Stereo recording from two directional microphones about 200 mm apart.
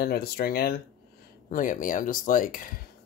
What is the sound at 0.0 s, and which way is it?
Speech, 50° left (ahead or behind).